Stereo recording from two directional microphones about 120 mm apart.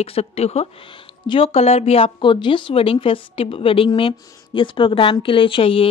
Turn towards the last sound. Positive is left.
turn(degrees=50)  # may be behind; listen again after turning